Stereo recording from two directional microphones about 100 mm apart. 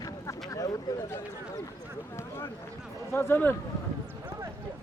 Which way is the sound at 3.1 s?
25° left (ahead or behind).